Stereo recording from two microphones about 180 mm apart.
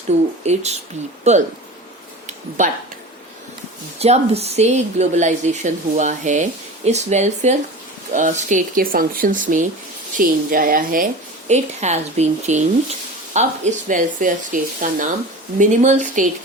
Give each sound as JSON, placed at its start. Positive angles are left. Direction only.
{"t": 0.4, "sound": "speech", "side_deg": -40}
{"t": 2.6, "sound": "speech", "side_deg": -40}
{"t": 3.9, "sound": "speech", "side_deg": -35}